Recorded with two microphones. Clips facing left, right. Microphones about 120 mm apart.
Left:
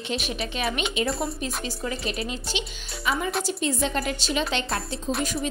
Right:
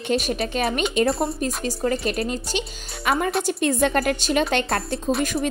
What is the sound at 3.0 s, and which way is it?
A woman's voice, 60° right (ahead or behind).